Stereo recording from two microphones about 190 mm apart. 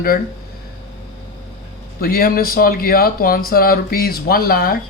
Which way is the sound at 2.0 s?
50° left (ahead or behind).